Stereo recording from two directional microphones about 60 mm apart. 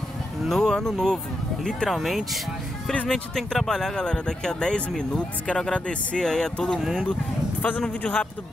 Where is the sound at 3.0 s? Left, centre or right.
Centre.